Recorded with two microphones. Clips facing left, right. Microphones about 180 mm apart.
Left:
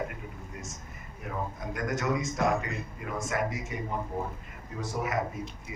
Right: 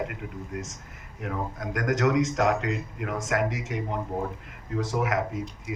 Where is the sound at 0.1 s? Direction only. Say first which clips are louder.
Right 7 dB; 75° right (ahead or behind).